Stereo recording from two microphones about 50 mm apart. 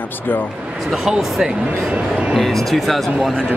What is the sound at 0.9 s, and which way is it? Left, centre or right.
Speech, centre.